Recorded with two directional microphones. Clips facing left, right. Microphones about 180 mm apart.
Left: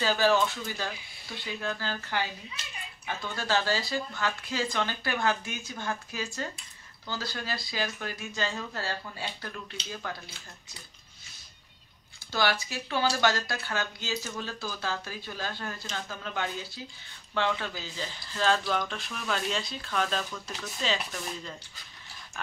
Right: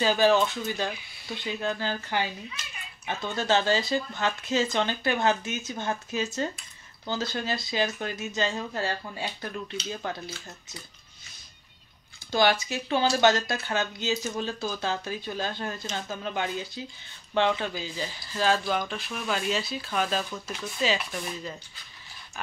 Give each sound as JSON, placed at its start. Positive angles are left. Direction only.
{"t": 0.0, "sound": "speech", "side_deg": -20}
{"t": 12.3, "sound": "speech", "side_deg": -20}